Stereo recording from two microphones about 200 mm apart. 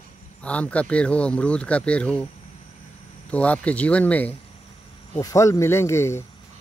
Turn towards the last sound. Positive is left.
turn(degrees=15)  # may be behind; listen again after turning